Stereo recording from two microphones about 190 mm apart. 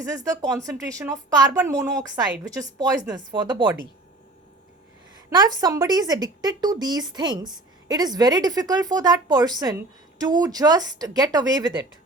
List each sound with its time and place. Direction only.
0.0 s a woman's voice: 15° right (ahead or behind)
5.3 s speech: 20° right (ahead or behind)